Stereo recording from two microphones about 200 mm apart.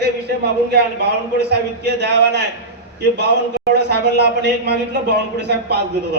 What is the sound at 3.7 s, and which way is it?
A man's voice, 55° right (ahead or behind).